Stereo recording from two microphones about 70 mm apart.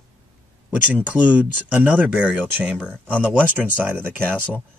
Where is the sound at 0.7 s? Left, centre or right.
Right.